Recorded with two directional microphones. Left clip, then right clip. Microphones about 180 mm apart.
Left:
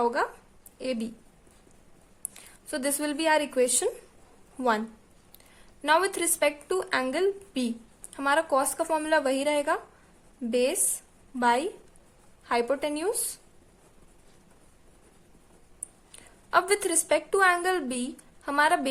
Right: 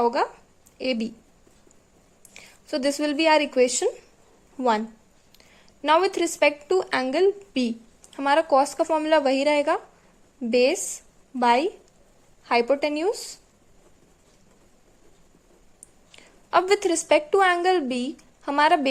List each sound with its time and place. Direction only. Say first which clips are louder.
0.0 s speech: right 4 dB; 25° right (ahead or behind)
2.3 s speech: right 6 dB; 20° right (ahead or behind)
5.5 s a woman's voice: right 4 dB; 20° right (ahead or behind)
16.1 s a woman's voice: right 3 dB; 20° right (ahead or behind)